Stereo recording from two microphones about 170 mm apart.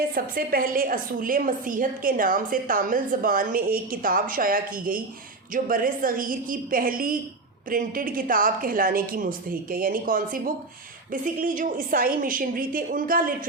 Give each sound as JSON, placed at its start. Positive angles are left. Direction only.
{"t": 0.1, "sound": "a woman's voice", "side_deg": -55}